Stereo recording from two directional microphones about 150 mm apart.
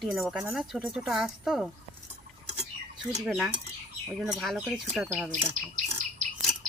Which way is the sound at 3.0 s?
5° right (ahead or behind).